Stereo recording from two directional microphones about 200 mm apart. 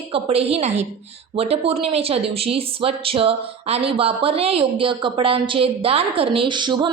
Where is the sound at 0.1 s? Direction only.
30° right (ahead or behind).